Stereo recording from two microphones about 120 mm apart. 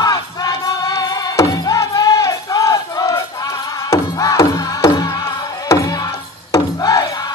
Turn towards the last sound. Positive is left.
turn(degrees=30)  # may be behind; listen again after turning